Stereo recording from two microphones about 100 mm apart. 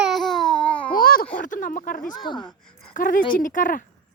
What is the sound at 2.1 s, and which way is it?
Speech, 50° left (ahead or behind).